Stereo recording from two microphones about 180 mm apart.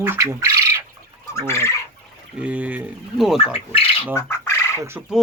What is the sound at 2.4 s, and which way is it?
Speech, 10° right (ahead or behind).